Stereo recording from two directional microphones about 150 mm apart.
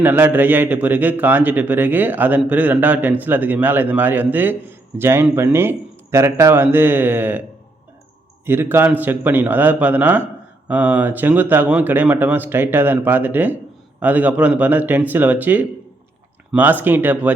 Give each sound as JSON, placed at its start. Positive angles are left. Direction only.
{"t": 0.0, "sound": "a man's voice", "side_deg": -15}
{"t": 8.4, "sound": "a man's voice", "side_deg": -15}